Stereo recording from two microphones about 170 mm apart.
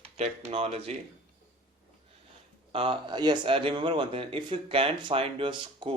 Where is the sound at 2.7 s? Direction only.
30° right (ahead or behind).